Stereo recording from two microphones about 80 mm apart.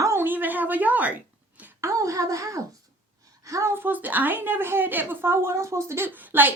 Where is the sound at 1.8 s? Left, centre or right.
Right.